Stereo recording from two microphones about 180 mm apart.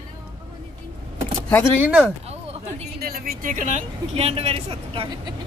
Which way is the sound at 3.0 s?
50° right (ahead or behind).